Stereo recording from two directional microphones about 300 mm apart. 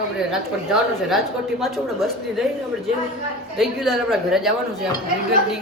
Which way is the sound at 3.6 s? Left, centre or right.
Centre.